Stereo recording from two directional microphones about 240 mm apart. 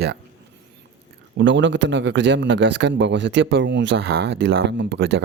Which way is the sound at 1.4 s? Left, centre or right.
Right.